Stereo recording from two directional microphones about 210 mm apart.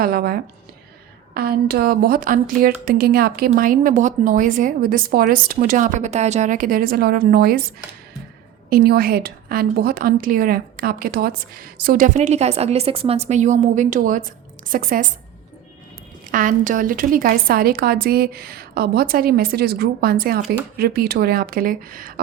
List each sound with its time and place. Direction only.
0.0 s speech: 45° right (ahead or behind)
8.7 s a woman's voice: 45° right (ahead or behind)
16.3 s speech: 40° right (ahead or behind)